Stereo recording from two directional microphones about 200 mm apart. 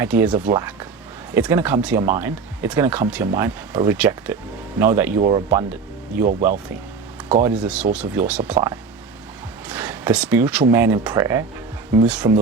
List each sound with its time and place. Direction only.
0.0 s speech: 10° right (ahead or behind)
7.4 s speech: 5° right (ahead or behind)
9.6 s speech: 10° right (ahead or behind)